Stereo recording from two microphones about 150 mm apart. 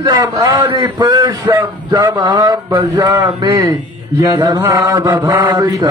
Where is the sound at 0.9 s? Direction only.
30° right (ahead or behind).